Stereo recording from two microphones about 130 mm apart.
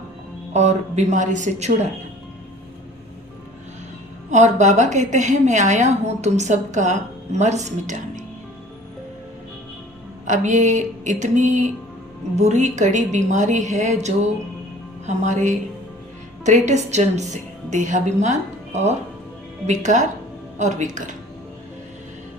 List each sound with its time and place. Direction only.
0.5 s a woman's voice: 60° right (ahead or behind)
4.3 s a woman's voice: 65° right (ahead or behind)
10.2 s a woman's voice: 70° right (ahead or behind)